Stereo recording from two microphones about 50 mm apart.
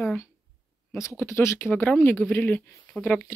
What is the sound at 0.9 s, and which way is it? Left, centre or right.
Speech, left.